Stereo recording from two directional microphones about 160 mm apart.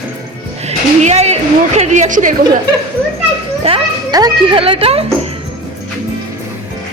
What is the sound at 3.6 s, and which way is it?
A child's voice, 35° right (ahead or behind).